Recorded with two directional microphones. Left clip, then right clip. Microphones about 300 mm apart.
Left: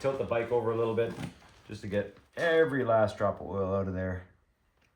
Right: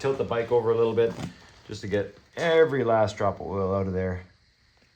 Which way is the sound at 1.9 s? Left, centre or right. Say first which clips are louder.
Right 5 dB; right.